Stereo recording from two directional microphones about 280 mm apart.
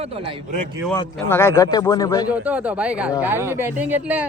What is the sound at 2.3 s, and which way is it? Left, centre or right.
Speech, centre.